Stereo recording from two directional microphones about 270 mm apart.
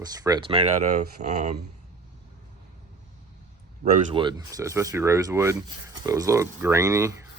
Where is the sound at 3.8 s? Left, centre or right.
Right.